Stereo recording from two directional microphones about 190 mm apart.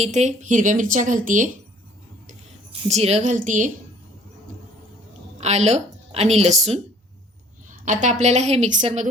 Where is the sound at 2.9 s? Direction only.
35° right (ahead or behind).